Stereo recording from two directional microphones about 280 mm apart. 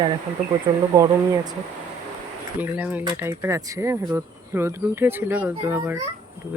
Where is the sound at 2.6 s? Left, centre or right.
Centre.